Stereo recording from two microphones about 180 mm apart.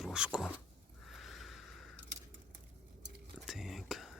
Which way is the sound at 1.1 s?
Centre (ahead or behind).